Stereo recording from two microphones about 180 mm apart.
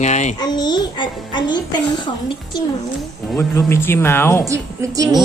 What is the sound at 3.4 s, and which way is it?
Speech, 15° left (ahead or behind).